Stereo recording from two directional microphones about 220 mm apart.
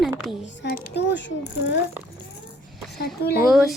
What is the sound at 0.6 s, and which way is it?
A child's voice, 40° left (ahead or behind).